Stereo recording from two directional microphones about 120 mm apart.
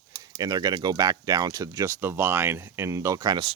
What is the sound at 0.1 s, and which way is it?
Speech, 35° right (ahead or behind).